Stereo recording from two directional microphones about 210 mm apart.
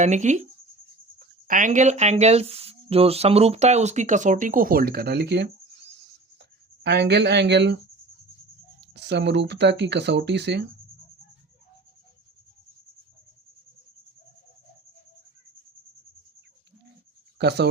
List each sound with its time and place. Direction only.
0.0 s speech: 35° right (ahead or behind)
1.5 s speech: 40° right (ahead or behind)
6.8 s speech: 55° right (ahead or behind)
8.8 s speech: 55° right (ahead or behind)
17.3 s speech: 50° right (ahead or behind)